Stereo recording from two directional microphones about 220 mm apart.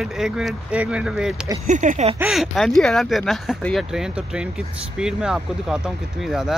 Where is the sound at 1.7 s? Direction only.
35° right (ahead or behind).